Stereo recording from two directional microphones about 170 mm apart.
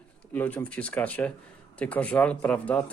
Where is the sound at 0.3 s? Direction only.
10° left (ahead or behind).